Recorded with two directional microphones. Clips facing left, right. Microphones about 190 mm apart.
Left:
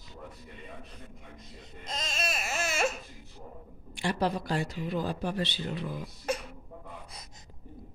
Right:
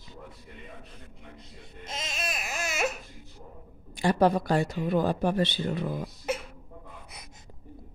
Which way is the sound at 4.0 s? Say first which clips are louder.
Right 7 dB; 50° right (ahead or behind).